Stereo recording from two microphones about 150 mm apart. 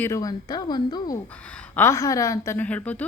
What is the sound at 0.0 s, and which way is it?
A woman's voice, 25° left (ahead or behind).